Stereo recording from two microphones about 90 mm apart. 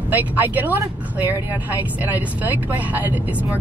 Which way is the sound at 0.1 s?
20° right (ahead or behind).